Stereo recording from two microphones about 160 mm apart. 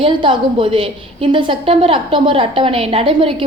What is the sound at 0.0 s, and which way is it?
A woman's voice, 30° right (ahead or behind).